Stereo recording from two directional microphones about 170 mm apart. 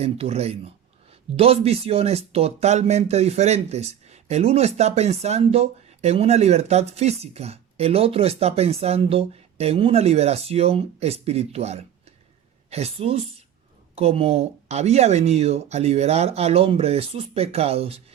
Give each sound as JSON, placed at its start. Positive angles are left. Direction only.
{"t": 0.0, "sound": "speech", "side_deg": -40}